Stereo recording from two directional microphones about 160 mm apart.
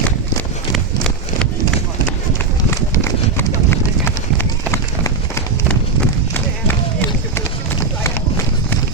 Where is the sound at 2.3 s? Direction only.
15° left (ahead or behind).